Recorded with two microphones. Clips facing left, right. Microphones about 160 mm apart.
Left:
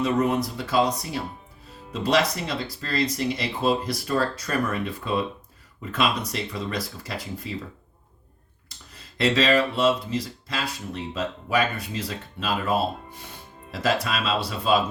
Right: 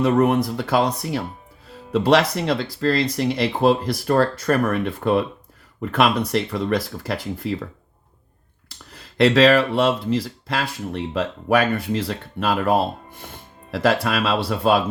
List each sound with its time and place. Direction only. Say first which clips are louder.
0.0 s speech: right 5 dB; 60° right (ahead or behind)
9.1 s speech: right 6 dB; 65° right (ahead or behind)